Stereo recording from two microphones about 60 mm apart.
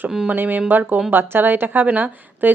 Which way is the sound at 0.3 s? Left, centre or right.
Right.